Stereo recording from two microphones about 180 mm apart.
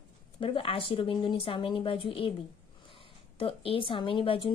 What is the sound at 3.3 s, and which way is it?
Speech, 30° left (ahead or behind).